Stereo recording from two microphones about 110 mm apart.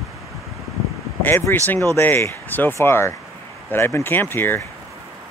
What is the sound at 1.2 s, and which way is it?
Speech, 20° left (ahead or behind).